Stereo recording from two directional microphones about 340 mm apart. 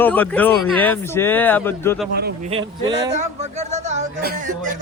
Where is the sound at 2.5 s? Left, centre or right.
Centre.